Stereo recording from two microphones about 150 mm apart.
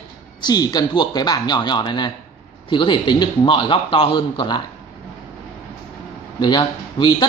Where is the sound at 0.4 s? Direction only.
25° left (ahead or behind).